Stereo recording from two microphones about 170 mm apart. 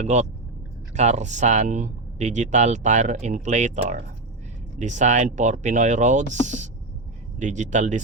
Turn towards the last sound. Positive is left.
turn(degrees=-45)  # may be behind; listen again after turning